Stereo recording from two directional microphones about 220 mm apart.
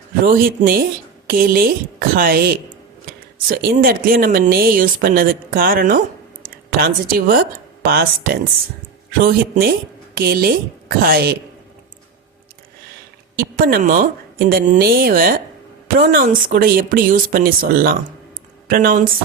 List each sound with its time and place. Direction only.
0.3 s a woman's voice: 40° right (ahead or behind)
13.3 s speech: 45° right (ahead or behind)